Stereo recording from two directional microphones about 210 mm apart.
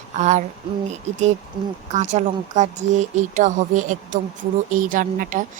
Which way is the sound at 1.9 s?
35° right (ahead or behind).